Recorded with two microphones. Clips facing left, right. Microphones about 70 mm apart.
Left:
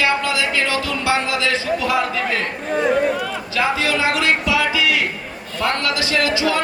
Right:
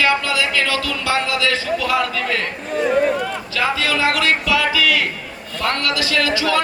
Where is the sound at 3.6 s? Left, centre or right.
Left.